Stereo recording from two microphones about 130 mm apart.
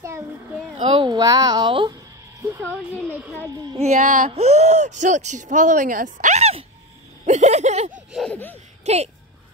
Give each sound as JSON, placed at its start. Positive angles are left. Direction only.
{"t": 0.8, "sound": "a woman's voice", "side_deg": -40}
{"t": 3.7, "sound": "speech", "side_deg": -60}
{"t": 7.2, "sound": "a sound", "side_deg": -60}
{"t": 8.3, "sound": "speech", "side_deg": 15}
{"t": 8.8, "sound": "speech", "side_deg": -55}